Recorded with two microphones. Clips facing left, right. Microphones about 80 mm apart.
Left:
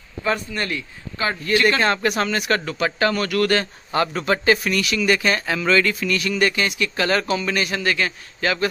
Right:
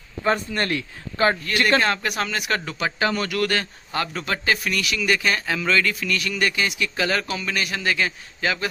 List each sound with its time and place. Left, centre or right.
0.5 s speech: right
1.8 s speech: centre
3.4 s speech: centre